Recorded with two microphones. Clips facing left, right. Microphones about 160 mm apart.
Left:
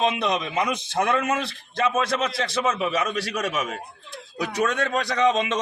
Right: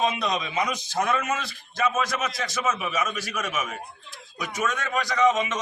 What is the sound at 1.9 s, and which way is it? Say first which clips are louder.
Speech: left 6 dB; 30° left (ahead or behind).